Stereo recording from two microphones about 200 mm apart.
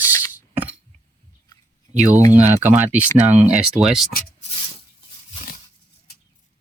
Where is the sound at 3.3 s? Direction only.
35° right (ahead or behind).